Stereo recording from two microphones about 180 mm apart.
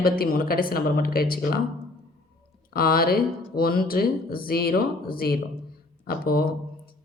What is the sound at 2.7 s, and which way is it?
Speech, 55° left (ahead or behind).